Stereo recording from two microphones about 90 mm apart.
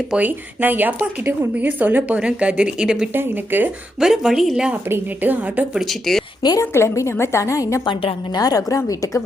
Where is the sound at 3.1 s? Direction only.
20° right (ahead or behind).